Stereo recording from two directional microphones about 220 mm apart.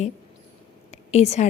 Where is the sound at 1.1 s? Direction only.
30° left (ahead or behind).